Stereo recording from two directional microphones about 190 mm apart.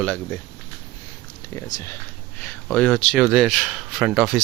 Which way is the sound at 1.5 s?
15° left (ahead or behind).